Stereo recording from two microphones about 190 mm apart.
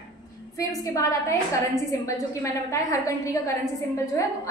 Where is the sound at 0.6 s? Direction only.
15° left (ahead or behind).